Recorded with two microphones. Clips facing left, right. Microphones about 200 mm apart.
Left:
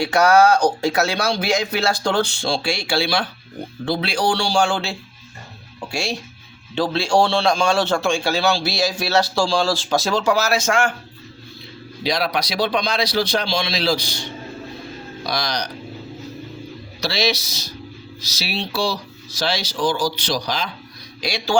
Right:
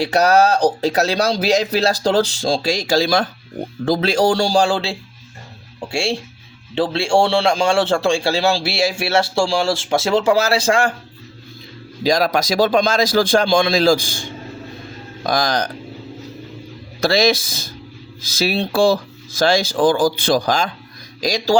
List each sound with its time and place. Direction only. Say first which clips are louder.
0.0 s a man's voice: even; 35° right (ahead or behind)
12.0 s speech: right 5 dB; 45° right (ahead or behind)
17.0 s speech: right 7 dB; 50° right (ahead or behind)